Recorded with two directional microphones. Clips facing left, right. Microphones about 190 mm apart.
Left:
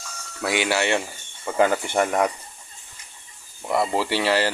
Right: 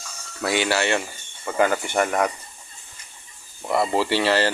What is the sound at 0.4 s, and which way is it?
Speech, 15° left (ahead or behind).